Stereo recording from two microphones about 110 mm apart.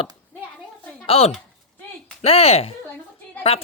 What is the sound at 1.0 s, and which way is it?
Speech, 60° left (ahead or behind).